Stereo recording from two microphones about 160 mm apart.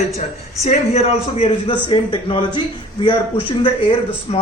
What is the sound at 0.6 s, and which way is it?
A woman's voice, 45° left (ahead or behind).